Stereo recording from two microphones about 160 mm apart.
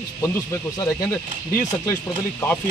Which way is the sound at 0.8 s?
20° left (ahead or behind).